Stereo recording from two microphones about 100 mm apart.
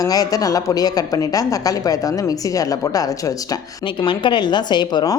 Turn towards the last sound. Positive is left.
turn(degrees=45)  # may be behind; listen again after turning